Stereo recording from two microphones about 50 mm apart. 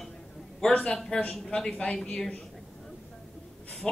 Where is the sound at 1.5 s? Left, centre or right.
Centre.